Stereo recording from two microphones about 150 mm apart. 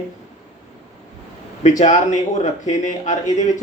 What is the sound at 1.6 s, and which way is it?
Speech, 55° left (ahead or behind).